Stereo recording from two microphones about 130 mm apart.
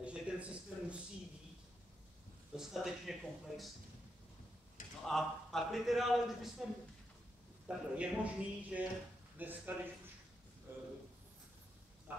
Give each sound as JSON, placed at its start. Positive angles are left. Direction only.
{"t": 0.0, "sound": "a sound", "side_deg": -10}
{"t": 2.5, "sound": "a man's voice", "side_deg": -5}
{"t": 5.0, "sound": "a man's voice", "side_deg": 0}
{"t": 12.1, "sound": "speech", "side_deg": -15}